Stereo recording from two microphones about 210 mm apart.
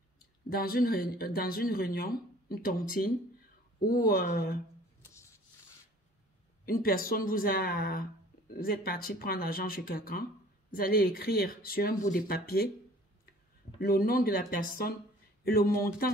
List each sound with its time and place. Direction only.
0.5 s speech: 45° left (ahead or behind)
6.6 s speech: 45° left (ahead or behind)
13.7 s speech: 45° left (ahead or behind)